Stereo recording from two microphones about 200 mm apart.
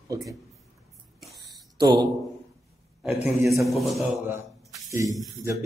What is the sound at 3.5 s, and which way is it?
Speech, centre (ahead or behind).